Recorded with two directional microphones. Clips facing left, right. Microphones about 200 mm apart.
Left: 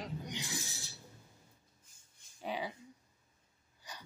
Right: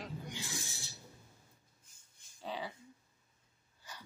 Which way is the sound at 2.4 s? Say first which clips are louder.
Left 3 dB; 15° left (ahead or behind).